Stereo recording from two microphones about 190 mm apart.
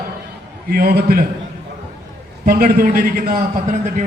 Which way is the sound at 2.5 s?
50° right (ahead or behind).